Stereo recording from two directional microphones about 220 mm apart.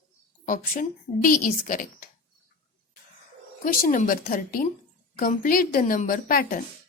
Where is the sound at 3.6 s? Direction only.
40° left (ahead or behind).